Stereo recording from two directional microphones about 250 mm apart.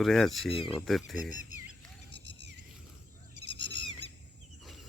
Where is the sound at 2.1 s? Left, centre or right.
Right.